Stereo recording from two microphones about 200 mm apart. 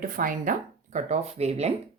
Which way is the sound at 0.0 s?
45° right (ahead or behind).